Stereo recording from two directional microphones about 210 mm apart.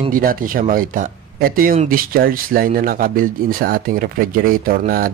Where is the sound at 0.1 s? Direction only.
40° right (ahead or behind).